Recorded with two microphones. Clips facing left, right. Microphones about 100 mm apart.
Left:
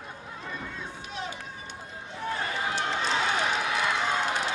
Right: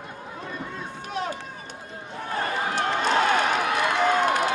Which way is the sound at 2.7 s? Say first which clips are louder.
Right 7 dB; 50° right (ahead or behind).